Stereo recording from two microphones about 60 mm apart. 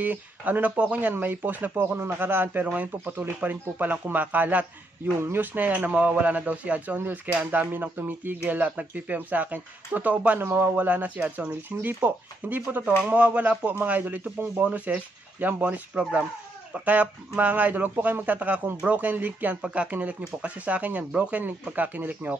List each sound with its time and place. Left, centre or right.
0.0 s speech: right
1.1 s speech: right
10.4 s speech: right